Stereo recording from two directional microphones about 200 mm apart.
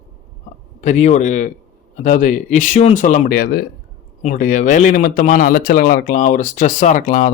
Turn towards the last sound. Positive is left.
turn(degrees=40)  # may be behind; listen again after turning